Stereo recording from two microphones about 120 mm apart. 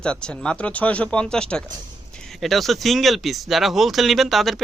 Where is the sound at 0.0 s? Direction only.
10° left (ahead or behind).